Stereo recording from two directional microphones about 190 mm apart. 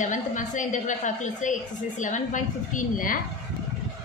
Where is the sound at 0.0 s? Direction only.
40° left (ahead or behind).